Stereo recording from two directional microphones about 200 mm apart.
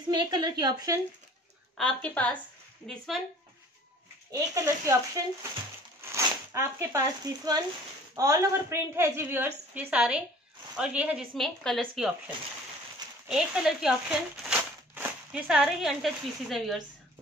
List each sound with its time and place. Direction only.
0.1 s speech: 20° right (ahead or behind)
1.8 s speech: 5° left (ahead or behind)
4.3 s a woman's voice: 15° right (ahead or behind); by 12.1 s centre (ahead or behind)
13.3 s speech: 5° right (ahead or behind)